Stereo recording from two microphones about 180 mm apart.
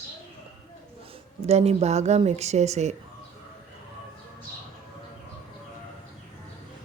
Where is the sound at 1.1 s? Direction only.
35° right (ahead or behind).